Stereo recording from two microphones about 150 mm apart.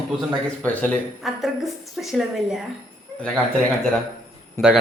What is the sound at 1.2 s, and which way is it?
Speech, centre (ahead or behind).